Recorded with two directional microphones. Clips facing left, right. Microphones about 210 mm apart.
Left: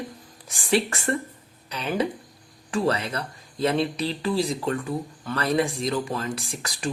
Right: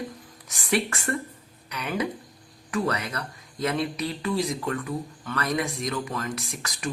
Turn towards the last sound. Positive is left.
turn(degrees=30)  # may be behind; listen again after turning